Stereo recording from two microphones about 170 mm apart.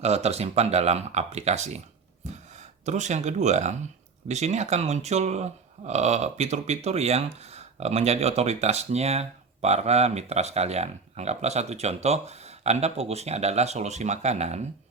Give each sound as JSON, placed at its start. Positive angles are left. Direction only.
{"t": 0.0, "sound": "speech", "side_deg": -40}
{"t": 2.8, "sound": "speech", "side_deg": -45}